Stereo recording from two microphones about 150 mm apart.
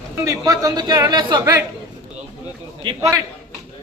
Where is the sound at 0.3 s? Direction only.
25° right (ahead or behind).